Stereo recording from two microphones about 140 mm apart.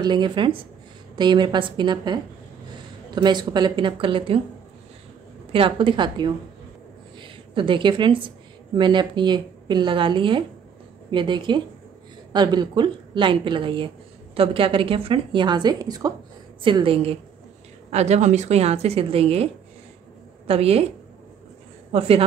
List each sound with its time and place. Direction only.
0.0 s a woman's voice: 35° right (ahead or behind)
5.5 s a woman's voice: 40° right (ahead or behind)
16.6 s a woman's voice: 40° right (ahead or behind)
17.9 s speech: 55° right (ahead or behind)
21.9 s speech: 45° right (ahead or behind)